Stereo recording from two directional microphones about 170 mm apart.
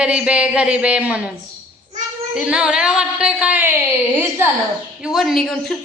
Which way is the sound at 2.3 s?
5° right (ahead or behind).